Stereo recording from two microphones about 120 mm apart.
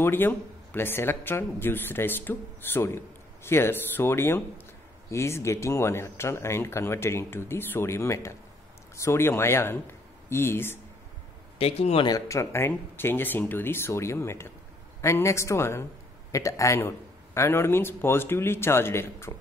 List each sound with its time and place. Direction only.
0.0 s speech: 20° left (ahead or behind)
11.5 s speech: 55° left (ahead or behind)
12.1 s speech: 25° left (ahead or behind)